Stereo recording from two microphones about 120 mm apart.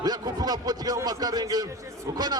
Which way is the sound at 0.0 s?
35° right (ahead or behind).